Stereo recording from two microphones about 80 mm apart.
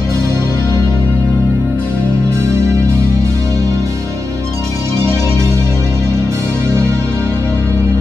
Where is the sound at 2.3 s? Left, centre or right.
Right.